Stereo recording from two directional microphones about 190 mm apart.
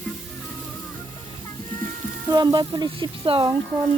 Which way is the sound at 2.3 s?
20° right (ahead or behind).